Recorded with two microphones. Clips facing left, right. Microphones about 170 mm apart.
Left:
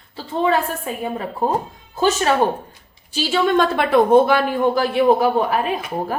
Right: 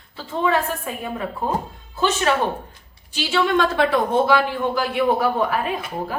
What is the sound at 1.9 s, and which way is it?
A woman's voice, 40° left (ahead or behind).